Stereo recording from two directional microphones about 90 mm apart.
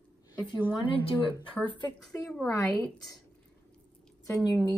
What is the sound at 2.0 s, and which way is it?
Speech, 5° left (ahead or behind).